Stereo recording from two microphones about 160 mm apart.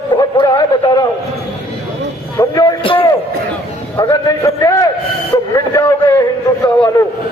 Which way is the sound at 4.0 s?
20° left (ahead or behind).